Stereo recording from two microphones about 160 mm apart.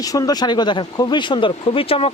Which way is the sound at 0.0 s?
20° left (ahead or behind).